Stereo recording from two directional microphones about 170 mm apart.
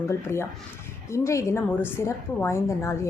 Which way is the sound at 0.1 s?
15° left (ahead or behind).